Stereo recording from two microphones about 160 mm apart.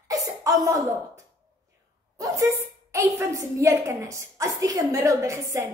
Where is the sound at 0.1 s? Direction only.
20° right (ahead or behind).